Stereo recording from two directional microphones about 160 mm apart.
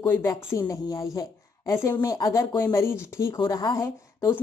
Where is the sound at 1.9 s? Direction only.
25° left (ahead or behind).